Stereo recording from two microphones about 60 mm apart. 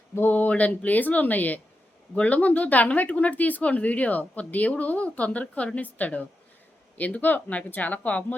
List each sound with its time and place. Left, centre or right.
0.1 s speech: left